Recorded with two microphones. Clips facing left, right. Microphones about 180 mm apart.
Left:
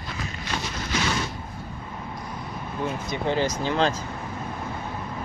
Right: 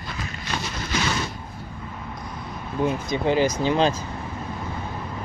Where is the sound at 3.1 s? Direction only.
10° right (ahead or behind).